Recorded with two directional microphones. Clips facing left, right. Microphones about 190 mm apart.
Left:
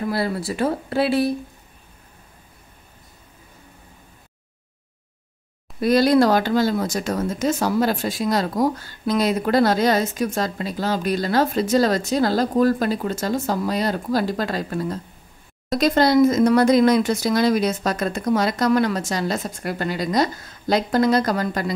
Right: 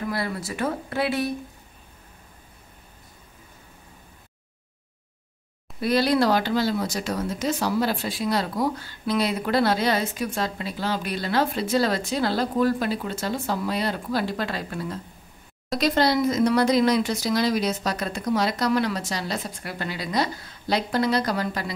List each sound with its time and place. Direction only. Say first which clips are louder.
0.0 s speech: left 5 dB; 30° left (ahead or behind)
5.8 s speech: left 5 dB; 45° left (ahead or behind)